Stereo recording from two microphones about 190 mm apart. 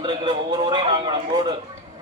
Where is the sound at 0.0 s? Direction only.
25° right (ahead or behind).